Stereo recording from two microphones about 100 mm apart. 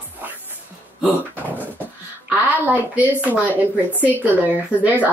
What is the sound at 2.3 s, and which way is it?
Speech, 15° right (ahead or behind).